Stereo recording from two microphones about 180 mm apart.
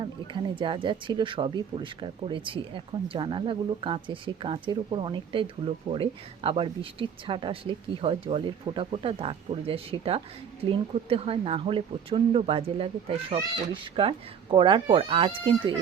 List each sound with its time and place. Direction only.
0.5 s speech: 25° right (ahead or behind)